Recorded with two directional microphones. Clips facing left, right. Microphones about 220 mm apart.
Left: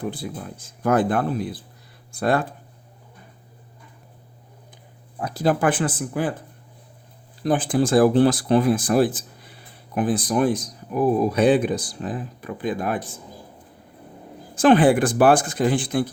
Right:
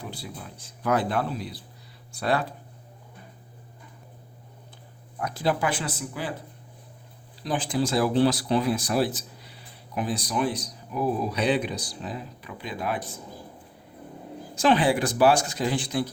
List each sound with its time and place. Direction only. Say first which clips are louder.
0.0 s speech: left 8 dB; 50° left (ahead or behind)
5.2 s speech: left 6 dB; 40° left (ahead or behind)
7.4 s speech: left 6 dB; 50° left (ahead or behind)
14.5 s speech: left 6 dB; 50° left (ahead or behind)